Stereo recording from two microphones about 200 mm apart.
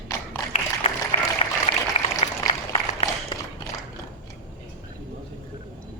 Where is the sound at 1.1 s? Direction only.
30° left (ahead or behind).